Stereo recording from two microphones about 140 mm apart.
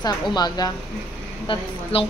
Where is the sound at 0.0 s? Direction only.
30° left (ahead or behind).